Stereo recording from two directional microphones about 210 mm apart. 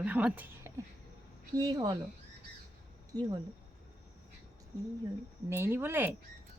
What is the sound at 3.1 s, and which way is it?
Speech, 15° right (ahead or behind).